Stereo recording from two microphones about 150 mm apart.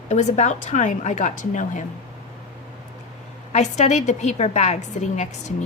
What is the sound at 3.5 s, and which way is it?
A woman's voice, 50° left (ahead or behind).